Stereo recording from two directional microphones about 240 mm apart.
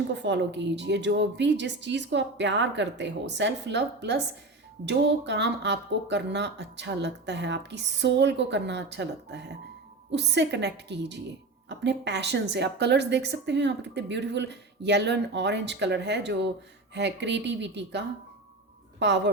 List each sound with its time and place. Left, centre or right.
0.1 s a woman's voice: right